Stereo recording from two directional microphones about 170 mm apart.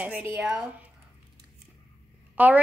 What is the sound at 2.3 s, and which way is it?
Speech, 10° right (ahead or behind).